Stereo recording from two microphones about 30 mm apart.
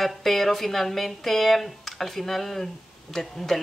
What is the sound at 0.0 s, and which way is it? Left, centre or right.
Speech, centre.